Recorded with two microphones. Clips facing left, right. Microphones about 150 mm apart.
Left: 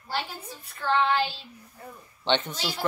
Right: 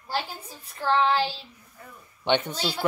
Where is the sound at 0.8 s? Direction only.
35° right (ahead or behind).